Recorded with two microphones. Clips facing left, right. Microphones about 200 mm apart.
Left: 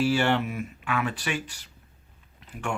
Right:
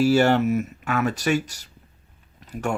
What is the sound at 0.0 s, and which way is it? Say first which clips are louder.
Speech: right 6 dB; 40° right (ahead or behind).